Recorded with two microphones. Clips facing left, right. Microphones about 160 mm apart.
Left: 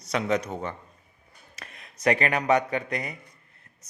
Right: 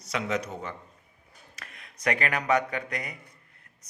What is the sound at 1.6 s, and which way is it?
A man's voice, 25° left (ahead or behind).